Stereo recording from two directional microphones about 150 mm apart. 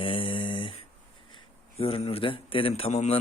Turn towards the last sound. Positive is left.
turn(degrees=45)  # may be behind; listen again after turning